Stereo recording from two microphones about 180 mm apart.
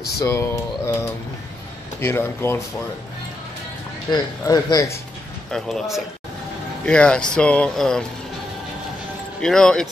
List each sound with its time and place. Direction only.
0.2 s speech: 15° left (ahead or behind)
2.0 s speech: 15° left (ahead or behind)
4.1 s speech: 20° left (ahead or behind)
5.5 s speech: centre (ahead or behind)
9.4 s speech: 5° left (ahead or behind)